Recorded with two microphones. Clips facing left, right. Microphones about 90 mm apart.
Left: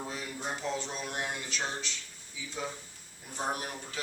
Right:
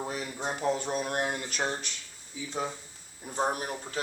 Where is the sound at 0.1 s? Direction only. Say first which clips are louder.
Right 4 dB; 55° right (ahead or behind).